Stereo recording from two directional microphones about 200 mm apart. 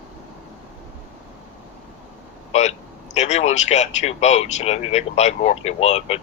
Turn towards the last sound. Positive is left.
turn(degrees=35)  # may be behind; listen again after turning